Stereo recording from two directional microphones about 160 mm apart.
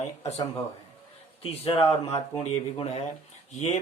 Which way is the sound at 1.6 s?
40° left (ahead or behind).